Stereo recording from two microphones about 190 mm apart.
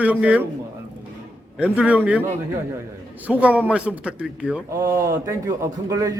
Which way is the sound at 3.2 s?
5° right (ahead or behind).